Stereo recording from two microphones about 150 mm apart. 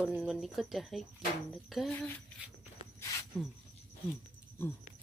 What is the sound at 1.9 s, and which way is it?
Speech, 10° left (ahead or behind).